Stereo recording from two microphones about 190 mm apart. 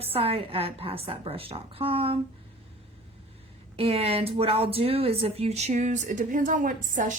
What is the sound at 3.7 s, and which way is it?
Speech, 30° right (ahead or behind).